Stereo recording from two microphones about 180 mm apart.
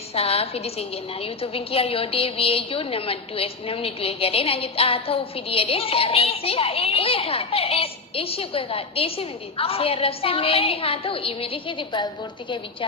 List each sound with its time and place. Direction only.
0.1 s a woman's voice: 35° left (ahead or behind)